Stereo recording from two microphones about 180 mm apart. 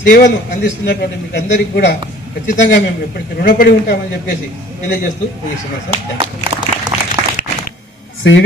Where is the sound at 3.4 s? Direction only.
55° left (ahead or behind).